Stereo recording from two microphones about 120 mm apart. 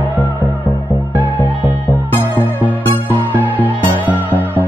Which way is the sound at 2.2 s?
15° right (ahead or behind).